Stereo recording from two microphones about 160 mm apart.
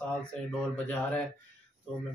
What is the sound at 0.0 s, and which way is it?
Speech, 5° left (ahead or behind).